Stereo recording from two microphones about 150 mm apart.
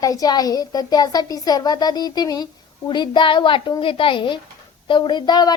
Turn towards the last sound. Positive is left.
turn(degrees=30)  # may be behind; listen again after turning